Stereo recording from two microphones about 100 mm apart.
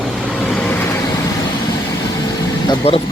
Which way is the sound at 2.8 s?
75° left (ahead or behind).